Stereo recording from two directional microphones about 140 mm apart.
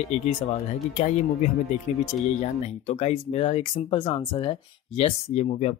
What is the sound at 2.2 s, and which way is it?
Speech, 50° left (ahead or behind).